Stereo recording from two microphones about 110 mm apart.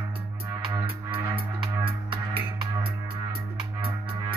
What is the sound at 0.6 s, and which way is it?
Music, 50° right (ahead or behind).